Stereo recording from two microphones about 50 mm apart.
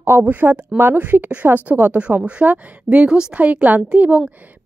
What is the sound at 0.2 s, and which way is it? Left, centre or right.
Speech, right.